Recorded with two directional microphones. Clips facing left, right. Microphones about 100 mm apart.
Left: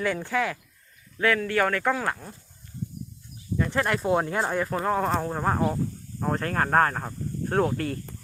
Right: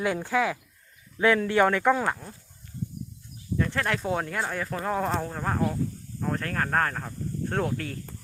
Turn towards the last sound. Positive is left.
turn(degrees=10)  # may be behind; listen again after turning